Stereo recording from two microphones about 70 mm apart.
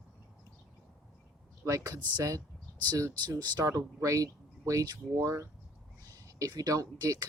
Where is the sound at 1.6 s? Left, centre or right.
Right.